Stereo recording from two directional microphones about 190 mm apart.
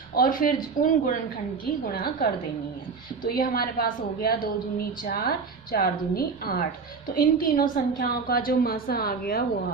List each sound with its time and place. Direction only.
0.1 s a woman's voice: 45° left (ahead or behind)